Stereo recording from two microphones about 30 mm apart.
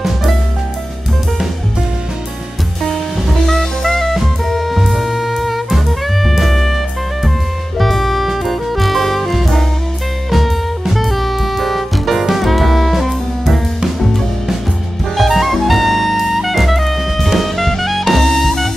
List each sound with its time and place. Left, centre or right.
2.8 s music: centre
7.8 s music: centre
15.1 s jazz: centre
18.1 s music: centre